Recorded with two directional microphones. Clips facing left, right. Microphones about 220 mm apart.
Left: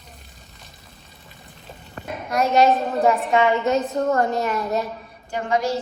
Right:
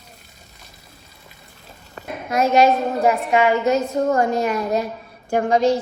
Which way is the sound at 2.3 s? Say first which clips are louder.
Right 2 dB; centre (ahead or behind).